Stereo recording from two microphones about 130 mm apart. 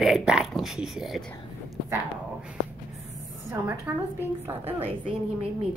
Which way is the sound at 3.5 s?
15° right (ahead or behind).